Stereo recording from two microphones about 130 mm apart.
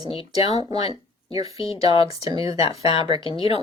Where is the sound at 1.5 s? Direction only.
50° left (ahead or behind).